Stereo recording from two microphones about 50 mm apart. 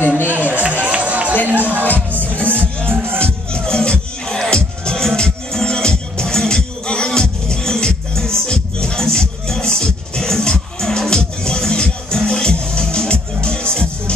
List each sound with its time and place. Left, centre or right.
0.5 s run: right
1.5 s music: right
3.5 s music: centre